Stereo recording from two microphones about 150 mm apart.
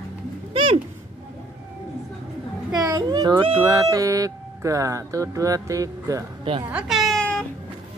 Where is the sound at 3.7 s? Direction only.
20° right (ahead or behind).